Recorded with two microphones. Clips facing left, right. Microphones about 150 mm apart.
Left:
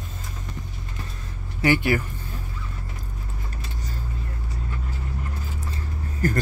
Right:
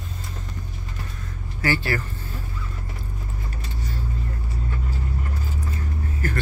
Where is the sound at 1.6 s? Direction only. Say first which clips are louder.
Left 4 dB; 15° left (ahead or behind).